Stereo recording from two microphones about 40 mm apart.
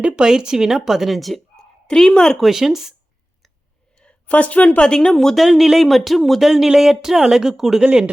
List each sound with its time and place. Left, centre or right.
0.0 s speech: centre
1.6 s a sound: centre
1.9 s speech: centre
2.4 s speech: centre
4.3 s a woman's voice: left
4.8 s speech: centre
5.4 s speech: centre
7.8 s speech: right